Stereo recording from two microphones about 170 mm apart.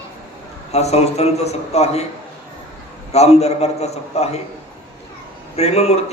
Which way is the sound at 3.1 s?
40° left (ahead or behind).